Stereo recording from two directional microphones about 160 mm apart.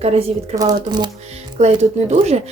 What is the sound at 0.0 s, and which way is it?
Speech, 40° right (ahead or behind).